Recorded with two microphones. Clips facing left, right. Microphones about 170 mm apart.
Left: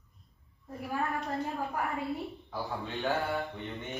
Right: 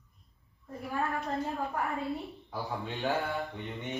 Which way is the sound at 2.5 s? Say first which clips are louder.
Right 2 dB; 20° right (ahead or behind).